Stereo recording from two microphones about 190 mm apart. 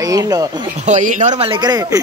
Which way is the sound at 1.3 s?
25° right (ahead or behind).